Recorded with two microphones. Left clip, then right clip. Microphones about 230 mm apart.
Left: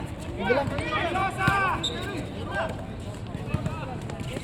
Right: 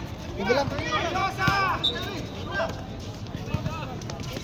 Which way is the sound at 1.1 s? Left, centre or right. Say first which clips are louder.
Left 1 dB; centre.